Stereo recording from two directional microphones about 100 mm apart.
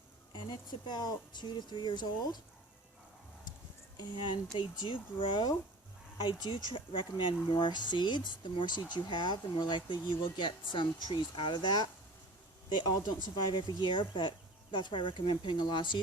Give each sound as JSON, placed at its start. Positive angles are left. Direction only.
{"t": 0.3, "sound": "speech", "side_deg": 50}
{"t": 3.9, "sound": "speech", "side_deg": 50}
{"t": 13.3, "sound": "speech", "side_deg": 50}